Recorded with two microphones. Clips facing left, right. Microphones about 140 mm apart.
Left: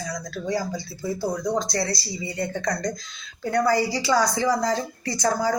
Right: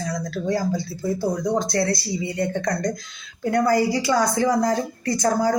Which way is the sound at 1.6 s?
55° right (ahead or behind).